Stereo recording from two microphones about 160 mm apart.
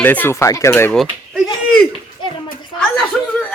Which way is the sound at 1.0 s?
Centre (ahead or behind).